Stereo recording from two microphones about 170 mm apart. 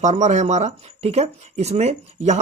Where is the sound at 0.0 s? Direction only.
45° right (ahead or behind).